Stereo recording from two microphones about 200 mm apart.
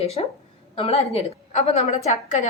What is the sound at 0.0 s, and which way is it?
A woman's voice, 30° left (ahead or behind).